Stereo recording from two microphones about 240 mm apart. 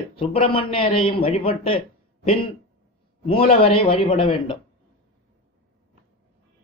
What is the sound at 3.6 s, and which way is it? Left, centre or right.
Speech, left.